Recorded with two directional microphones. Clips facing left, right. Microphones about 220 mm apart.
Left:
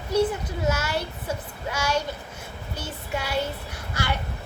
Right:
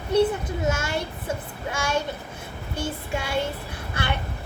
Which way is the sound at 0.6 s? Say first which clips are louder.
Left 1 dB; 25° right (ahead or behind).